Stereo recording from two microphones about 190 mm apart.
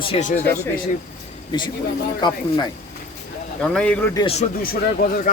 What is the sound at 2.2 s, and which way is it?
Speech, 20° left (ahead or behind).